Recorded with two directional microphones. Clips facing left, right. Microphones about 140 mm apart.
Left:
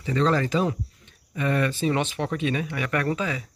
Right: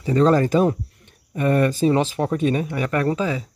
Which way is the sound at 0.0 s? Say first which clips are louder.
Right 6 dB; 45° right (ahead or behind).